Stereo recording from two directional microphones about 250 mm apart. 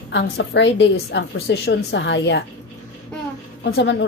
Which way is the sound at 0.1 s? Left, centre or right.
Left.